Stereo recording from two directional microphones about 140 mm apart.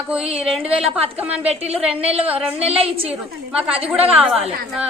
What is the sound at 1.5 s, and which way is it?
A woman's voice, 45° right (ahead or behind).